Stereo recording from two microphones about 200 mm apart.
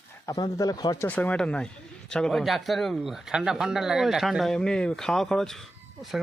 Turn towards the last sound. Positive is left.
turn(degrees=0)  # may be behind; listen again after turning